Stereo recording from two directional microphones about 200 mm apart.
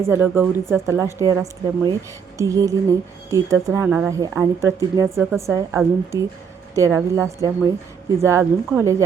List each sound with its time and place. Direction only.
0.0 s a woman's voice: 10° right (ahead or behind)
5.0 s speech: centre (ahead or behind)
5.5 s a woman's voice: 15° right (ahead or behind)